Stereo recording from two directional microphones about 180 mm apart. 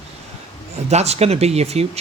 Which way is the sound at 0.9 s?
35° right (ahead or behind).